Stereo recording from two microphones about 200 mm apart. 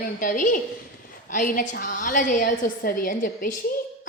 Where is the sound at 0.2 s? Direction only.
40° left (ahead or behind).